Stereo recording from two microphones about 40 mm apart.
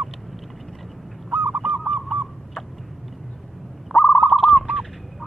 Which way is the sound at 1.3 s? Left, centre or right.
Right.